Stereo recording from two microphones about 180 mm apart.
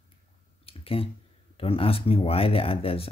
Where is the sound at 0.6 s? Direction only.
30° left (ahead or behind).